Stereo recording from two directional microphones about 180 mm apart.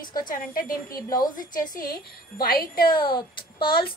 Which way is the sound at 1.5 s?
50° left (ahead or behind).